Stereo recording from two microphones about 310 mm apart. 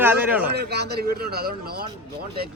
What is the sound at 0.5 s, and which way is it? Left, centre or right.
A man's voice, right.